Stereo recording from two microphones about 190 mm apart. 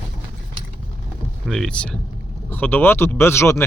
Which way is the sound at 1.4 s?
Centre (ahead or behind).